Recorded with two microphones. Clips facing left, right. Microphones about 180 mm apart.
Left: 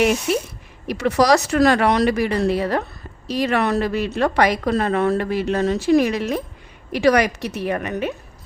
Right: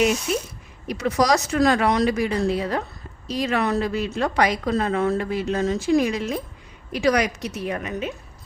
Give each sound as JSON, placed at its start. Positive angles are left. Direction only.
{"t": 0.0, "sound": "a woman's voice", "side_deg": 65}